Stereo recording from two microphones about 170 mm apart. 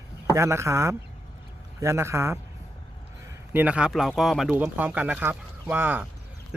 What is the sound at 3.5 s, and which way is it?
Speech, 10° right (ahead or behind).